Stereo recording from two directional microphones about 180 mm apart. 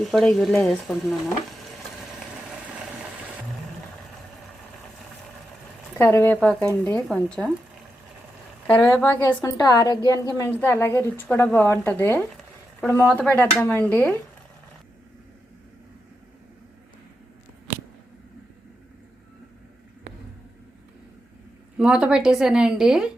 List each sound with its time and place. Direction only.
0.0 s speech: centre (ahead or behind)
6.0 s a woman's voice: 15° left (ahead or behind)
8.6 s a woman's voice: 10° left (ahead or behind)
21.8 s speech: 5° right (ahead or behind)